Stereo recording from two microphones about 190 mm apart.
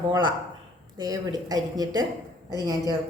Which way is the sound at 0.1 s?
25° right (ahead or behind).